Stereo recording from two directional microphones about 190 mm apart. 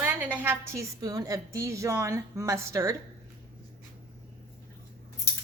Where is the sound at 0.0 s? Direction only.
10° right (ahead or behind).